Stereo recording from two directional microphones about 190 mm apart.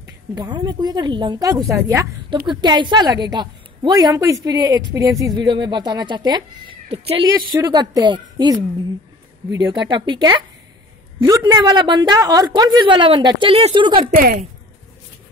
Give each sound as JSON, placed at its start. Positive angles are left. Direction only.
{"t": 0.3, "sound": "speech", "side_deg": -20}
{"t": 14.1, "sound": "a woman's voice", "side_deg": -50}